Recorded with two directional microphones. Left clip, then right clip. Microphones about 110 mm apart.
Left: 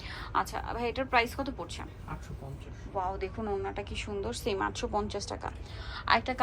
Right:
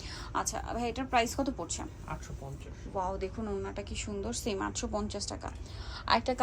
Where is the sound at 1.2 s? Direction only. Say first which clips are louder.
Right 2 dB; 45° right (ahead or behind).